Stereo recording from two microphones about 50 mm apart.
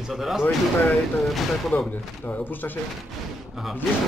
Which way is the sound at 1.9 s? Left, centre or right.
Left.